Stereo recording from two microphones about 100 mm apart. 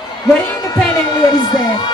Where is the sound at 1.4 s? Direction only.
45° left (ahead or behind).